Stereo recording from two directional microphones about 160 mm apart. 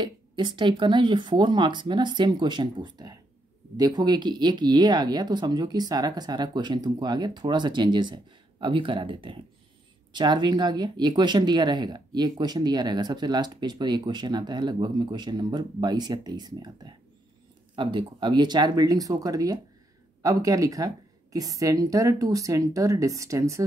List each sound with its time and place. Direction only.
0.0 s speech: 25° right (ahead or behind)